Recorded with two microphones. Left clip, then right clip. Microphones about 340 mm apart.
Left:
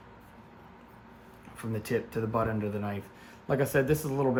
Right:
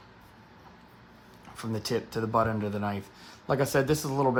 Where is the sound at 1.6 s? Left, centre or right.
Centre.